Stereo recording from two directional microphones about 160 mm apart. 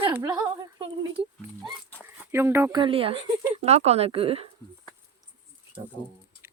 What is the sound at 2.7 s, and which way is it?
Speech, 30° right (ahead or behind).